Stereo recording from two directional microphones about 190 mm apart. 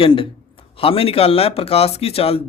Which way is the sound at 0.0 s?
30° left (ahead or behind).